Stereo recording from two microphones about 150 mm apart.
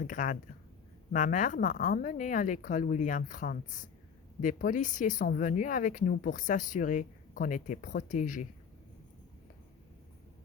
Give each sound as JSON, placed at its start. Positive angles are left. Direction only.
{"t": 0.0, "sound": "speech", "side_deg": 60}